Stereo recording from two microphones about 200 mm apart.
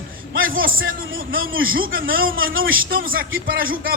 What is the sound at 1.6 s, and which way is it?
A man's voice, 45° right (ahead or behind).